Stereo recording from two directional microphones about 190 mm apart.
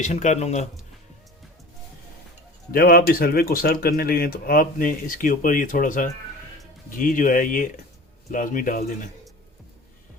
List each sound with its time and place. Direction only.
0.0 s speech: 40° left (ahead or behind)
2.7 s speech: 50° left (ahead or behind)